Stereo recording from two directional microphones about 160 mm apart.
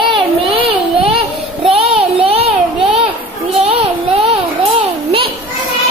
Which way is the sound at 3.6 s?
40° right (ahead or behind).